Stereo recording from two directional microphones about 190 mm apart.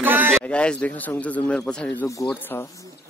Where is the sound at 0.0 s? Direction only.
10° right (ahead or behind).